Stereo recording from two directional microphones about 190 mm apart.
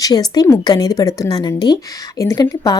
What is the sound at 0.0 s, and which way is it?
Speech, 20° left (ahead or behind).